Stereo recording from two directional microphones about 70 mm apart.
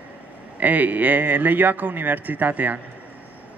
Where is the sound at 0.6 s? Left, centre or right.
Right.